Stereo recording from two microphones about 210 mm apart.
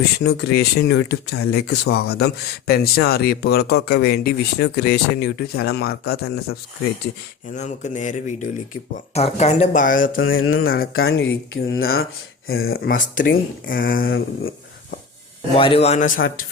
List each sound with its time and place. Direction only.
0.2 s speech: 50° left (ahead or behind)
7.5 s speech: 35° left (ahead or behind)
10.2 s mantra: 75° left (ahead or behind)
10.7 s speech: 45° left (ahead or behind)
11.5 s speech: 65° left (ahead or behind)
12.5 s speech: 45° left (ahead or behind)
15.5 s speech: 25° left (ahead or behind); by 16.5 s 40° left (ahead or behind)